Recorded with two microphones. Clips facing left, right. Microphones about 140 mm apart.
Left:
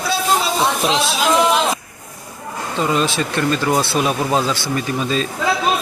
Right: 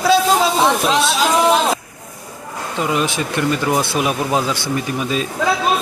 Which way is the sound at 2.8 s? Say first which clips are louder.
Left 1 dB; 15° right (ahead or behind).